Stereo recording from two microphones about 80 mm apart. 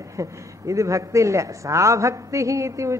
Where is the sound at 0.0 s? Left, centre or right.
Right.